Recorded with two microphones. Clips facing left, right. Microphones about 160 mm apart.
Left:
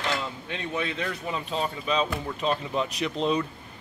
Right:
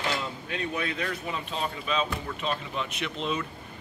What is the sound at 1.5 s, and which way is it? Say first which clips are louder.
Speech: left 4 dB; 35° left (ahead or behind).